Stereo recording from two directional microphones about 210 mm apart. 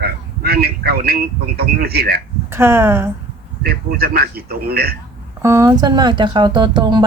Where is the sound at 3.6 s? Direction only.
45° right (ahead or behind).